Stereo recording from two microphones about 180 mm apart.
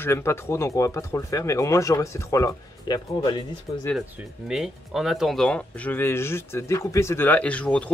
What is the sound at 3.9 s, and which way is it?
Speech, centre (ahead or behind).